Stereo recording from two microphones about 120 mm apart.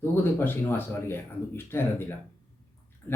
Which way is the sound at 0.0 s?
20° left (ahead or behind).